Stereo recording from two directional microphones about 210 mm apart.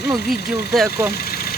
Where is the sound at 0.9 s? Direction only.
50° left (ahead or behind).